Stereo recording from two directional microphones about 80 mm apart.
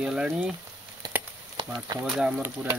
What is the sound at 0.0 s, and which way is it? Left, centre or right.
Speech, centre.